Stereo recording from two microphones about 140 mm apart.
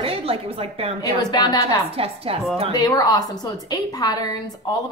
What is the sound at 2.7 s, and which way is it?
A woman's voice, 25° left (ahead or behind).